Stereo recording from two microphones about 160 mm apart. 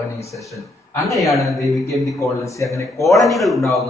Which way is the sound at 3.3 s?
Centre (ahead or behind).